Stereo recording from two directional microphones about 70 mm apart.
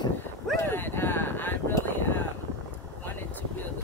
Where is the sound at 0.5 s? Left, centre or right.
Left.